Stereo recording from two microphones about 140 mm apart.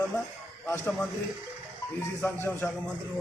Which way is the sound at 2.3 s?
15° left (ahead or behind).